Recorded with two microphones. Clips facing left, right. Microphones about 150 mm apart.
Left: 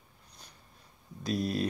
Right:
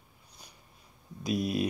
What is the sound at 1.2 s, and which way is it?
Speech, 10° right (ahead or behind).